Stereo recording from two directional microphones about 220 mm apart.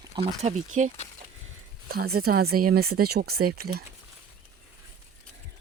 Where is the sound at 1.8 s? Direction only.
45° right (ahead or behind).